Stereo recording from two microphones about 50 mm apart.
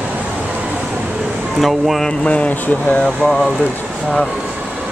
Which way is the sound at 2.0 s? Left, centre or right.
Left.